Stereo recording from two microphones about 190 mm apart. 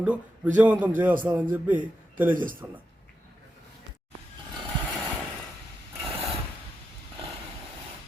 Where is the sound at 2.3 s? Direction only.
45° right (ahead or behind).